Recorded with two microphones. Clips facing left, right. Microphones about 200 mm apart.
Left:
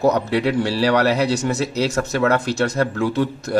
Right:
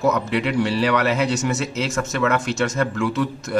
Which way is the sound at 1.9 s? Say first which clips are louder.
Left 1 dB; 40° left (ahead or behind).